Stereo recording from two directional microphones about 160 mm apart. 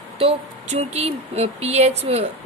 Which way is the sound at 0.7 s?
40° right (ahead or behind).